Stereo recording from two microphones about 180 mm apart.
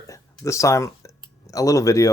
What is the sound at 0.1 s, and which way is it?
Speech, 15° left (ahead or behind).